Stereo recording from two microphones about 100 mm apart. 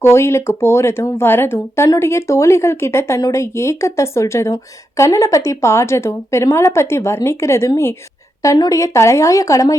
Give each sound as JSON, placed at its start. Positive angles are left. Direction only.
{"t": 0.0, "sound": "a woman's voice", "side_deg": 25}
{"t": 8.4, "sound": "a woman's voice", "side_deg": 40}